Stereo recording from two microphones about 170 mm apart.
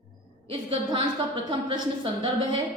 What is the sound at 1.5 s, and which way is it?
Speech, 30° right (ahead or behind).